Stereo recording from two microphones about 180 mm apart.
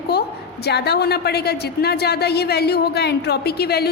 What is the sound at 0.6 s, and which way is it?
A woman's voice, 65° left (ahead or behind).